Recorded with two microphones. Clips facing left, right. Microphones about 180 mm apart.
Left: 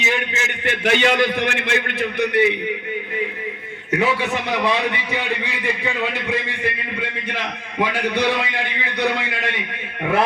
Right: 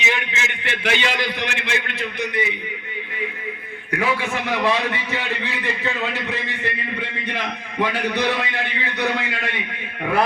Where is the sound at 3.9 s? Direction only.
20° left (ahead or behind).